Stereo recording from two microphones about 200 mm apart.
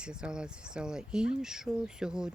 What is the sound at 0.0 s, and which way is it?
Speech, 5° right (ahead or behind).